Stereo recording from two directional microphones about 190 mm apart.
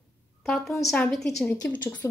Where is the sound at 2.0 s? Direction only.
15° left (ahead or behind).